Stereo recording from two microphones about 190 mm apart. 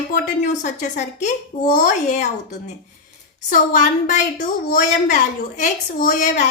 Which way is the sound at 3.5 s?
45° left (ahead or behind).